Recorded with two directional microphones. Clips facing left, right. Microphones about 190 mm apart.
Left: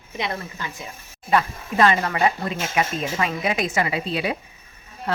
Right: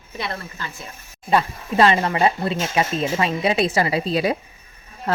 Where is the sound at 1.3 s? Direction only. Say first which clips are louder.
Right 1 dB; 25° right (ahead or behind).